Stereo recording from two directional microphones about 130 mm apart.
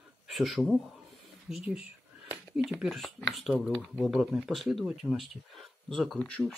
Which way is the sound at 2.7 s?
Centre (ahead or behind).